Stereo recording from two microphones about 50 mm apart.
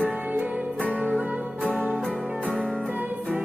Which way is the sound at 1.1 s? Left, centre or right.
Right.